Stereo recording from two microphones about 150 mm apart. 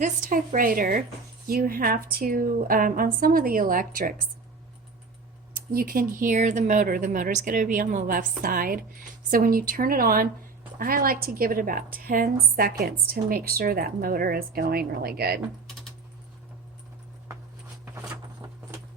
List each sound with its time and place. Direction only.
0.0 s speech: 65° right (ahead or behind)
5.5 s speech: 75° right (ahead or behind)
12.8 s a woman's voice: 85° right